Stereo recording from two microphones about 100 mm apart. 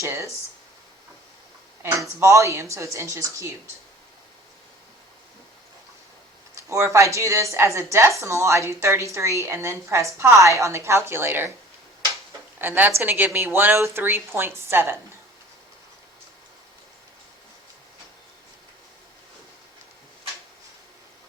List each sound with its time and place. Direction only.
0.0 s speech: 30° right (ahead or behind)
2.1 s a woman's voice: 30° right (ahead or behind)
6.5 s a woman's voice: 30° right (ahead or behind)
12.5 s a woman's voice: 20° right (ahead or behind)